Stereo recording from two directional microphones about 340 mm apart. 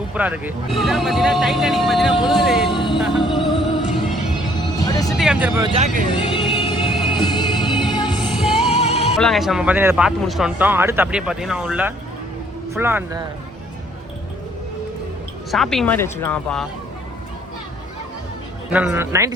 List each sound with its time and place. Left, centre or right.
0.1 s speech: centre
2.6 s speech: centre
3.3 s music: centre
4.8 s music: centre
5.1 s speech: centre
6.1 s music: centre
8.3 s music: centre
8.7 s music: centre
9.1 s speech: centre
15.5 s speech: centre
18.7 s speech: centre